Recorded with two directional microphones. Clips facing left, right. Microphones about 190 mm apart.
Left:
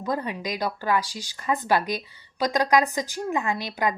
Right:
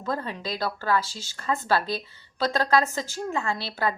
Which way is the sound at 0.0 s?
15° left (ahead or behind).